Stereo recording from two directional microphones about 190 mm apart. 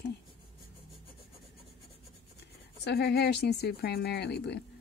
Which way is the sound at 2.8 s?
60° left (ahead or behind).